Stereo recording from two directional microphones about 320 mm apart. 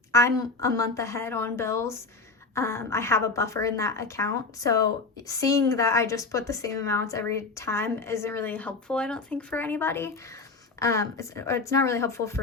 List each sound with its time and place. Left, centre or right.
0.1 s speech: centre